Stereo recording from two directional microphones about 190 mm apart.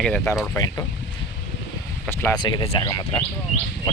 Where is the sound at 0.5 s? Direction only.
15° left (ahead or behind).